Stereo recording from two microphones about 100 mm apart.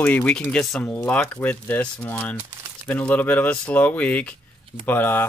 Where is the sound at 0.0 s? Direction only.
15° left (ahead or behind).